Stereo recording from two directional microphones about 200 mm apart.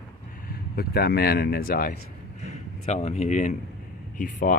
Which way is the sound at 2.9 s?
35° left (ahead or behind).